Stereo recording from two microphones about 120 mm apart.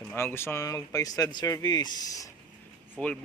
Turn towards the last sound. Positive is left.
turn(degrees=10)  # may be behind; listen again after turning